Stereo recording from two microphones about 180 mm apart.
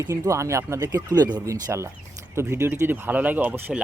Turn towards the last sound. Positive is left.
turn(degrees=-10)  # may be behind; listen again after turning